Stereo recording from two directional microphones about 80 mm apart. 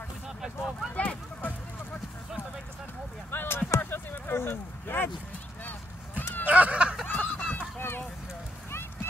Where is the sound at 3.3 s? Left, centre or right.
Left.